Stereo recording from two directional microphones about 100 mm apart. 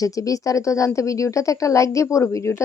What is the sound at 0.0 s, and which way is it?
A woman's voice, 35° left (ahead or behind).